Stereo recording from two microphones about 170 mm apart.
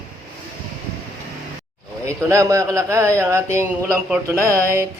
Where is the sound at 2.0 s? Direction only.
20° right (ahead or behind).